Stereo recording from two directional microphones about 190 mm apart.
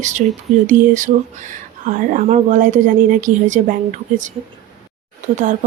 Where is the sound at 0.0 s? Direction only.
40° right (ahead or behind).